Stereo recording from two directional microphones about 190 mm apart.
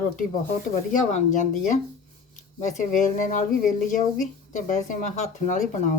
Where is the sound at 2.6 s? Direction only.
45° left (ahead or behind).